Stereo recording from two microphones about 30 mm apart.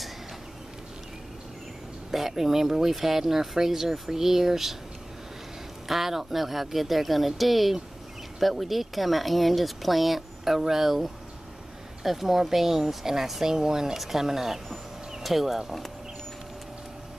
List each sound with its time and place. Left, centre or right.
2.0 s speech: centre
5.9 s speech: centre
13.9 s speech: centre